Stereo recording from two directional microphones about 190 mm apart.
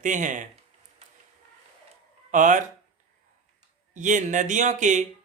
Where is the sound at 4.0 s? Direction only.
40° right (ahead or behind).